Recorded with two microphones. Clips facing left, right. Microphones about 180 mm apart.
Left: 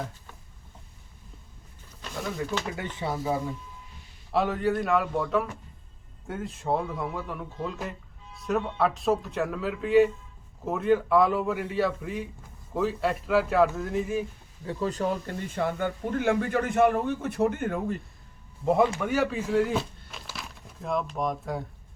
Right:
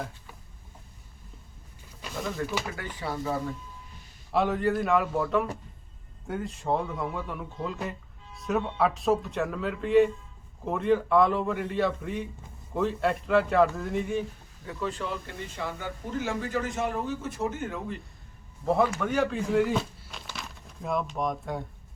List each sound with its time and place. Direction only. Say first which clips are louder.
2.0 s speech: even; 5° right (ahead or behind)
2.7 s speech: left 3 dB; 25° left (ahead or behind)
3.2 s speech: left 1 dB; 10° left (ahead or behind)
4.3 s speech: even; centre (ahead or behind)
14.6 s speech: left 5 dB; 35° left (ahead or behind)
18.6 s speech: left 2 dB; 20° left (ahead or behind); by 21.7 s centre (ahead or behind)